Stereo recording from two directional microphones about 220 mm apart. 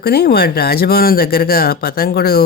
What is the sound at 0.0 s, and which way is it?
Speech, 45° left (ahead or behind).